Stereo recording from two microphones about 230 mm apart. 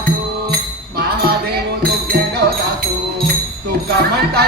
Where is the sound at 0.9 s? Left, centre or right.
Right.